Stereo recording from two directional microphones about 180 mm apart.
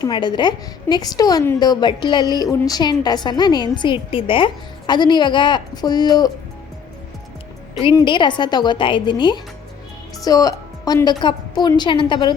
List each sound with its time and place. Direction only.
0.0 s a woman's voice: 25° left (ahead or behind)
7.9 s a woman's voice: 25° left (ahead or behind)